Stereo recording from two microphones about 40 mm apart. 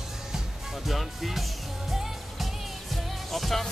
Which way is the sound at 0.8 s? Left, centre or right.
Centre.